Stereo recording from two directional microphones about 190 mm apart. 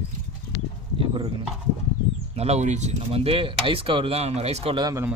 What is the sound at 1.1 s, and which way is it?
Speech, 25° right (ahead or behind).